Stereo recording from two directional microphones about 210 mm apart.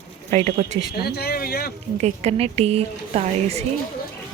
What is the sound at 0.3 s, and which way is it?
Speech, 35° right (ahead or behind).